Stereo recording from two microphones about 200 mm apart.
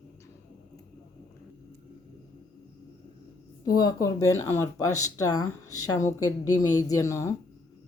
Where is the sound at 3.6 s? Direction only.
20° left (ahead or behind).